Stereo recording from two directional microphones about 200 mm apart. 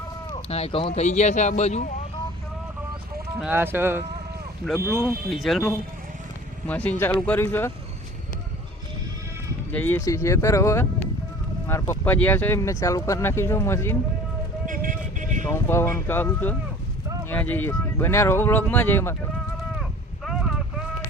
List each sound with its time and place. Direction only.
0.4 s a man's voice: 30° left (ahead or behind)
3.4 s speech: 10° right (ahead or behind)
5.0 s speech: centre (ahead or behind)
6.7 s speech: 10° left (ahead or behind)
9.7 s speech: 10° left (ahead or behind)
14.7 s vehicle: 40° right (ahead or behind)
15.4 s speech: 10° left (ahead or behind)
19.8 s a sound: centre (ahead or behind)